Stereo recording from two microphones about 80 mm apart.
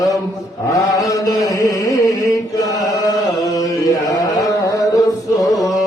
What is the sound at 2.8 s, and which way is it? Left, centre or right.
Carnatic music, left.